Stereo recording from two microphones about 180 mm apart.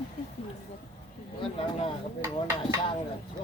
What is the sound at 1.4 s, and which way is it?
Speech, 30° left (ahead or behind).